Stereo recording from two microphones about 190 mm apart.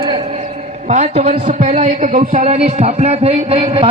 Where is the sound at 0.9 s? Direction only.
35° right (ahead or behind).